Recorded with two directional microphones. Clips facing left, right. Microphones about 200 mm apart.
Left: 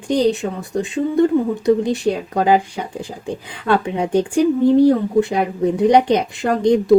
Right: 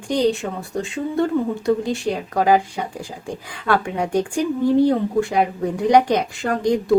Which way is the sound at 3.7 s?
20° left (ahead or behind).